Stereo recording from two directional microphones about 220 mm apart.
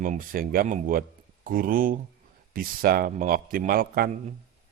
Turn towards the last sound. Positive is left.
turn(degrees=-35)  # may be behind; listen again after turning